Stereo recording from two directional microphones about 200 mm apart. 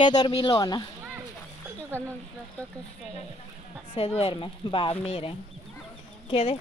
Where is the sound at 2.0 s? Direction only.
10° left (ahead or behind).